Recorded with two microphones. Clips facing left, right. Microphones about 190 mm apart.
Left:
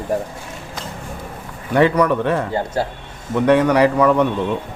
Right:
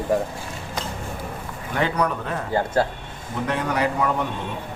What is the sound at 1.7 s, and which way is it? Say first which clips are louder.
Speech: left 8 dB; 80° left.